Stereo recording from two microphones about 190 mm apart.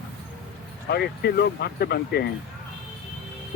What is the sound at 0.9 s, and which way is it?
Speech, 60° left (ahead or behind).